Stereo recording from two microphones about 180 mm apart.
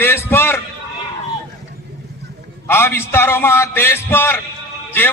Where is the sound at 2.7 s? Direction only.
15° left (ahead or behind).